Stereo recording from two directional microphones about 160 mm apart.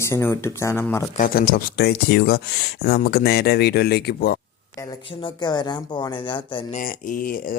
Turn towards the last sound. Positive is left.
turn(degrees=60)  # may be behind; listen again after turning